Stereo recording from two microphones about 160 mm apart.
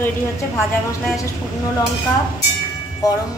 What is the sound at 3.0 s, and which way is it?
Speech, 25° left (ahead or behind).